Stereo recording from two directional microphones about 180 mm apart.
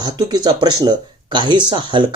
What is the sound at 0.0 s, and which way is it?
Speech, 20° right (ahead or behind).